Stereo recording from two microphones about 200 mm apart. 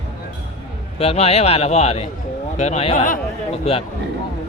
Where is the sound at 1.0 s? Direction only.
30° left (ahead or behind).